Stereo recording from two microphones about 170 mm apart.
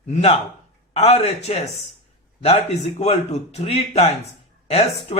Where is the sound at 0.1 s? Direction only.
35° left (ahead or behind).